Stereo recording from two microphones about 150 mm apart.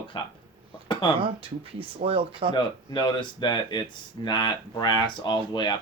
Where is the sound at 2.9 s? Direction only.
30° left (ahead or behind).